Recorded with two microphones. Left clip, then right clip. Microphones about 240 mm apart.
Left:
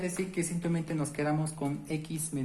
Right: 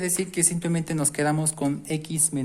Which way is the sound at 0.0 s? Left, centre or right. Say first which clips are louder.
Right 7 dB; right.